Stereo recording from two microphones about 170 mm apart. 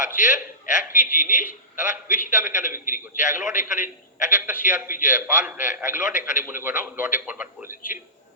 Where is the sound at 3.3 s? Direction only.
10° right (ahead or behind).